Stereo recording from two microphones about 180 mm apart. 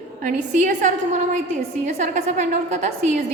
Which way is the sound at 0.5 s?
45° right (ahead or behind).